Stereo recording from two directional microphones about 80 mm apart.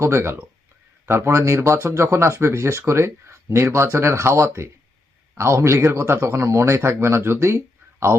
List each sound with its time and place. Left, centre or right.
0.0 s speech: right